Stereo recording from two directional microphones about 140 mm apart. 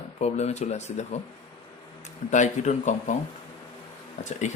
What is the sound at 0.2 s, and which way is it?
Speech, 50° left (ahead or behind).